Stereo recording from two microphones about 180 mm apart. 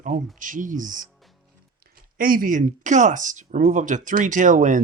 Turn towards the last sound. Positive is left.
turn(degrees=-45)  # may be behind; listen again after turning